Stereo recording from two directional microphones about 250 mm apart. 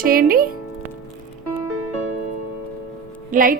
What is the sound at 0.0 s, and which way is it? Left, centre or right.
Speech, right.